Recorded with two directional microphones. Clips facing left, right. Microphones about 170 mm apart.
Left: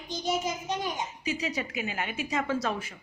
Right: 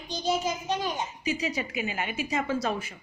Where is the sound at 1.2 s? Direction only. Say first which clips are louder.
Right 2 dB; 5° right (ahead or behind).